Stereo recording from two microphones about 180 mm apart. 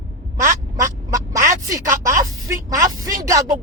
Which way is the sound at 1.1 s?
15° right (ahead or behind).